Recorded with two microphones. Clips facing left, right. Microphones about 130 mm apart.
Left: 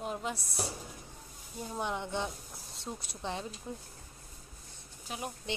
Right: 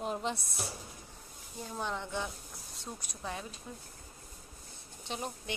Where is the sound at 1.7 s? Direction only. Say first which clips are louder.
Left 2 dB; 15° left (ahead or behind).